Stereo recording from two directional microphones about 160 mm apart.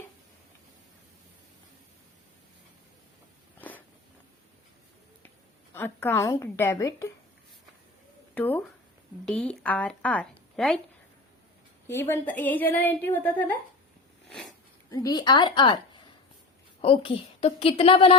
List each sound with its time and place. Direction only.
3.6 s a sound: 10° left (ahead or behind)
5.7 s a woman's voice: 15° left (ahead or behind)
8.4 s a woman's voice: 10° left (ahead or behind)
11.9 s a woman's voice: 15° left (ahead or behind)
14.8 s a woman's voice: 25° left (ahead or behind)
16.8 s a woman's voice: 35° left (ahead or behind)